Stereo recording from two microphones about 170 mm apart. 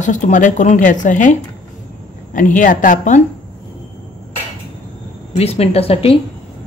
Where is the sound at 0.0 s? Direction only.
45° left (ahead or behind).